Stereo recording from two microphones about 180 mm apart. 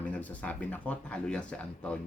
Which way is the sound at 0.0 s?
10° left (ahead or behind).